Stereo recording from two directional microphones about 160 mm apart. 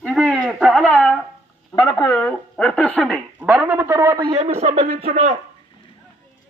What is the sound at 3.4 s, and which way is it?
A man's voice, 5° right (ahead or behind).